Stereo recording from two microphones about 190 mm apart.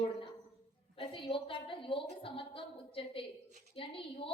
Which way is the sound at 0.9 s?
25° left (ahead or behind).